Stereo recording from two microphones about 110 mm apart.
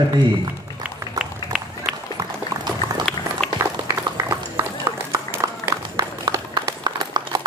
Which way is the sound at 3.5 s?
30° right (ahead or behind).